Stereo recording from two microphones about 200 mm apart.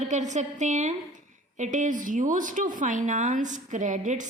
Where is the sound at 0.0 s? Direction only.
35° right (ahead or behind).